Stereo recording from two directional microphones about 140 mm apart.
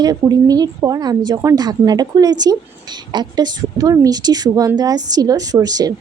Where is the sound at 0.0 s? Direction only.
25° right (ahead or behind).